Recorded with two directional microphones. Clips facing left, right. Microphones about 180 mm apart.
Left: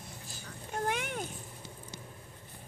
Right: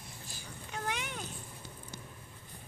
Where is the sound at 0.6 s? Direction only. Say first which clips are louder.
Left 5 dB; 50° left (ahead or behind).